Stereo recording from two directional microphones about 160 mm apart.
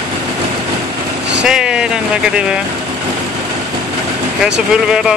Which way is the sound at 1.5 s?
5° right (ahead or behind).